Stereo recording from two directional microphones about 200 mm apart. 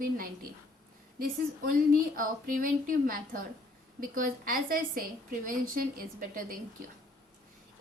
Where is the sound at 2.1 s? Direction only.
45° right (ahead or behind).